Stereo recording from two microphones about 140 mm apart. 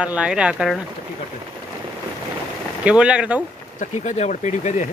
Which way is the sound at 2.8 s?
5° right (ahead or behind).